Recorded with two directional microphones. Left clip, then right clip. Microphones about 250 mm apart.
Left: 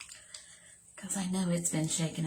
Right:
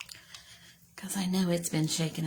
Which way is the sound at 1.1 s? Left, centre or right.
Right.